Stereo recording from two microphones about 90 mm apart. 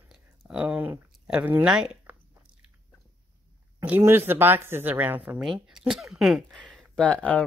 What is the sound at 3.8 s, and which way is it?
Speech, 25° right (ahead or behind).